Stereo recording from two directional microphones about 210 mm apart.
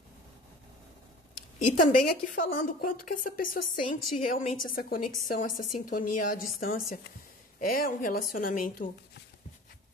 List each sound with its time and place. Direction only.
1.9 s a woman's voice: 40° left (ahead or behind)